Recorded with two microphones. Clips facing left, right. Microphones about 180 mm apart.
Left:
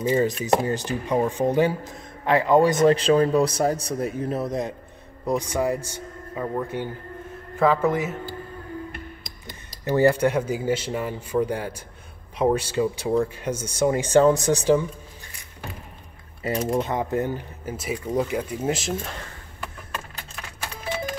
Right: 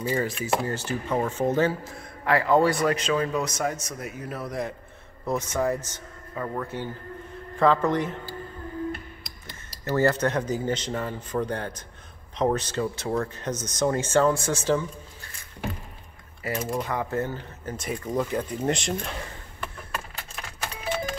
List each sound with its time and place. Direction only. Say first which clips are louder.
0.0 s speech: left 5 dB; 20° left (ahead or behind)
9.8 s speech: left 4 dB; 15° left (ahead or behind)
16.4 s speech: left 5 dB; 25° left (ahead or behind); by 19.1 s 5° left (ahead or behind)